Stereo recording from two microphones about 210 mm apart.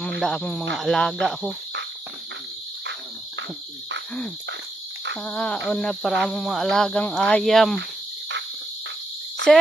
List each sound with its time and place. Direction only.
0.2 s speech: centre (ahead or behind)
5.2 s speech: 5° left (ahead or behind)